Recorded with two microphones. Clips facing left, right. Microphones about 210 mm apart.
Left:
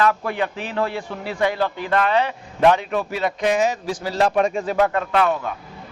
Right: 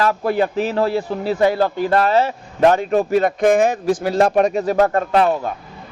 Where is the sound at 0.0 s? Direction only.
35° right (ahead or behind).